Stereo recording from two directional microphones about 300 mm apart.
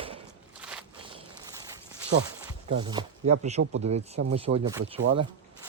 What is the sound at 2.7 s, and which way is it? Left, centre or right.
Speech, centre.